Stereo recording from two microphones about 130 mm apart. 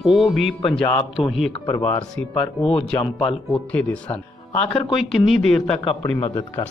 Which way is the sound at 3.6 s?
10° left (ahead or behind).